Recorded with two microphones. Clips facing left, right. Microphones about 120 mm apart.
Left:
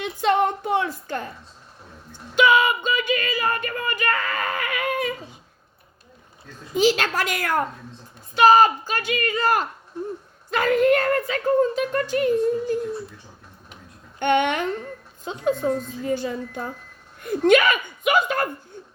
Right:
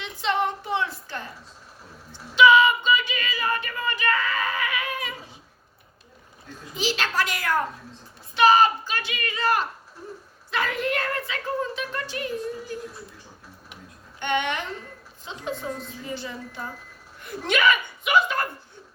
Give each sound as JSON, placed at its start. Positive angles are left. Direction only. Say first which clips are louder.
{"t": 0.0, "sound": "a sound", "louder": "left 5 dB", "side_deg": 50}
{"t": 6.7, "sound": "speech", "louder": "left 6 dB", "side_deg": 50}
{"t": 14.2, "sound": "speech", "louder": "left 6 dB", "side_deg": 50}